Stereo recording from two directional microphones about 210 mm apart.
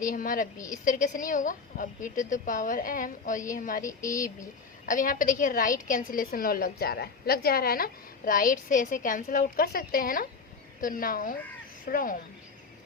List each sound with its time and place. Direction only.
0.0 s a woman's voice: 40° left (ahead or behind)
3.8 s speech: 15° left (ahead or behind)
4.9 s a woman's voice: 40° left (ahead or behind)